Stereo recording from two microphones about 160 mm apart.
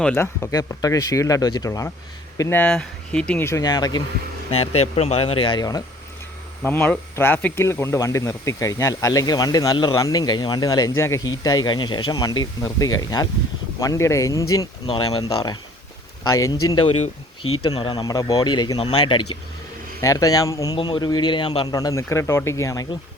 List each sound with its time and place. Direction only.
0.0 s speech: 10° left (ahead or behind)
4.8 s speech: 40° left (ahead or behind); by 5.8 s 25° left (ahead or behind)
6.6 s speech: 10° left (ahead or behind); by 15.3 s 25° left (ahead or behind)
16.3 s speech: 20° left (ahead or behind)
20.0 s speech: 20° left (ahead or behind)
21.8 s speech: 20° left (ahead or behind)